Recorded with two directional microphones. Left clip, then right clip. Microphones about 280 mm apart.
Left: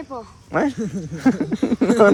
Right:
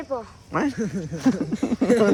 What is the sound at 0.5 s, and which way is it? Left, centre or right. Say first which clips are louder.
Speech: left 4 dB; centre.